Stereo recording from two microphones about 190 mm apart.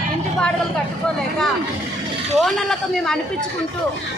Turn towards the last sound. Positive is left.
turn(degrees=0)  # may be behind; listen again after turning